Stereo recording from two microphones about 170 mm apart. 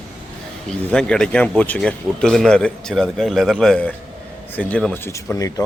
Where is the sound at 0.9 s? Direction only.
5° left (ahead or behind).